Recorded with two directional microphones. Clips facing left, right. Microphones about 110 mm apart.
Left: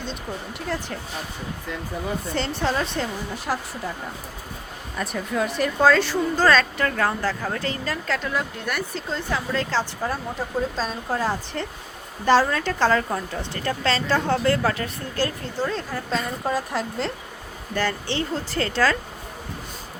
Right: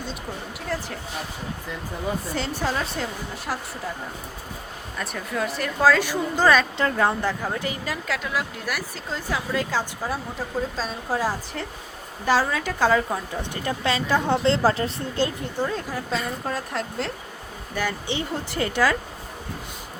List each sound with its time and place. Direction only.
0.7 s speech: centre (ahead or behind)
2.3 s speech: 10° right (ahead or behind)
4.9 s a woman's voice: 5° left (ahead or behind)
17.7 s a woman's voice: 15° right (ahead or behind)